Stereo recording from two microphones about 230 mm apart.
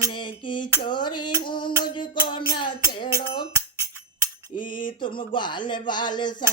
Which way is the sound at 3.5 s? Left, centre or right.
Centre.